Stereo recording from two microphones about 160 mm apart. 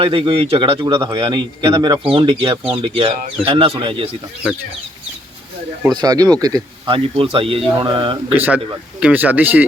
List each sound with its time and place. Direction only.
0.0 s a man's voice: 35° right (ahead or behind)
5.8 s speech: 25° right (ahead or behind)
8.4 s speech: 10° right (ahead or behind)